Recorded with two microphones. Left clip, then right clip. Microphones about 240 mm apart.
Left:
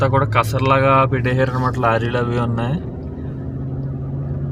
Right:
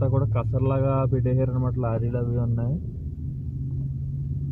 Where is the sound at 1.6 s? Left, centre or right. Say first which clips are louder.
Left 12 dB; centre.